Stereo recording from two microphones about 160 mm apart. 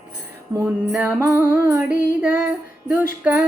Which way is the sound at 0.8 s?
15° right (ahead or behind).